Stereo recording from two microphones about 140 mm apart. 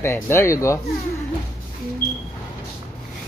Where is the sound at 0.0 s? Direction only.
15° left (ahead or behind).